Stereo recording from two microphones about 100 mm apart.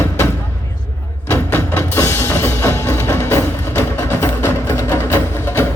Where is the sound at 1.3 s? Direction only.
20° left (ahead or behind).